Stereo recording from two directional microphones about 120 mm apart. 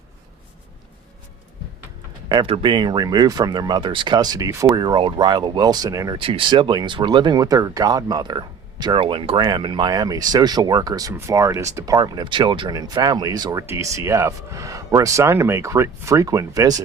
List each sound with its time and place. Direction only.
2.3 s speech: 45° right (ahead or behind); by 6.1 s 30° right (ahead or behind)
6.1 s speech: 45° right (ahead or behind); by 16.8 s 30° right (ahead or behind)